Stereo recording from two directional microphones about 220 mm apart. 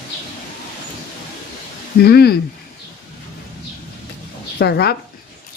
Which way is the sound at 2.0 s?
45° left (ahead or behind).